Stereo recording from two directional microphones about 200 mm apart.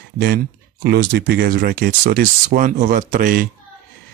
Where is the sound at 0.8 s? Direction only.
55° right (ahead or behind).